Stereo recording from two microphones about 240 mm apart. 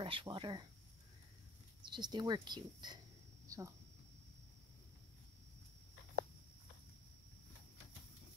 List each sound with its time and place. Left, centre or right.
0.0 s speech: right
1.9 s speech: centre
3.4 s a sound: centre